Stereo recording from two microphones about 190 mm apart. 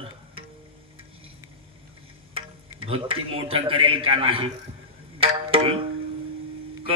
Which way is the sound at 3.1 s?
30° right (ahead or behind).